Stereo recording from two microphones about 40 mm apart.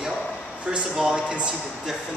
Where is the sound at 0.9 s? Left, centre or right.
Centre.